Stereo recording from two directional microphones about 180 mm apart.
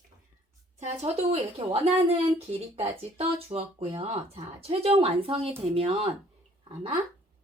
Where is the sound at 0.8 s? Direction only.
35° right (ahead or behind).